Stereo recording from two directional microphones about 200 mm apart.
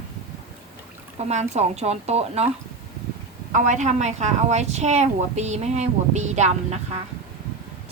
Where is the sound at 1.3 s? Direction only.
35° right (ahead or behind).